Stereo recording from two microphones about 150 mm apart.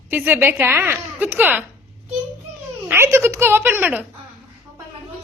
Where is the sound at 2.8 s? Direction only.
15° right (ahead or behind).